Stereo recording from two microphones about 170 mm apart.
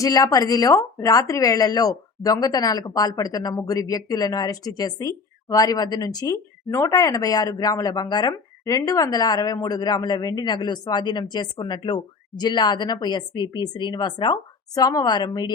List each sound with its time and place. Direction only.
0.0 s speech: 20° left (ahead or behind)